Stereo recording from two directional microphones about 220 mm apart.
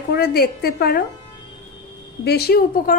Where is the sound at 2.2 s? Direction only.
45° left (ahead or behind).